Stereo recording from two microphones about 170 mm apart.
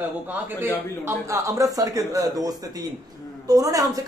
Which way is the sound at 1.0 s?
15° right (ahead or behind).